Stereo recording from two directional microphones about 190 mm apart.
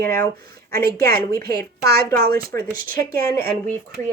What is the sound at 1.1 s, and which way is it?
A woman's voice, 55° right (ahead or behind).